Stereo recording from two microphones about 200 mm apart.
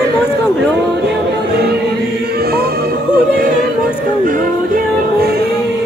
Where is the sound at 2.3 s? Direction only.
50° right (ahead or behind).